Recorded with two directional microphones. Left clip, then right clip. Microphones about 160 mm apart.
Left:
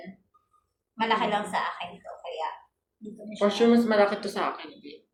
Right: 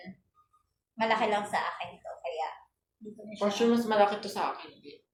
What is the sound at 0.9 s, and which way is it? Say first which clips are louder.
Speech: left 2 dB; 15° right (ahead or behind).